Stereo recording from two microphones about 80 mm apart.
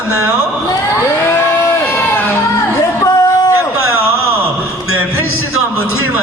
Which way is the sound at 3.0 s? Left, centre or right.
Left.